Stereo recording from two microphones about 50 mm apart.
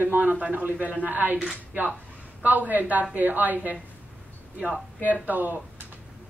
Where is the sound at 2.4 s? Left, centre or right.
Right.